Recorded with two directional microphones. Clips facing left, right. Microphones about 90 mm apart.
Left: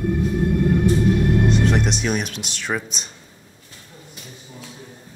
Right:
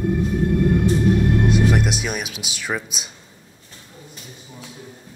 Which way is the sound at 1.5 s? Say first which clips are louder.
Right 1 dB; 5° right (ahead or behind).